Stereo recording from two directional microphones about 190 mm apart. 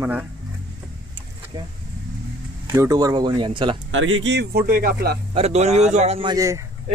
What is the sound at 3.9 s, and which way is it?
Speech, 90° right.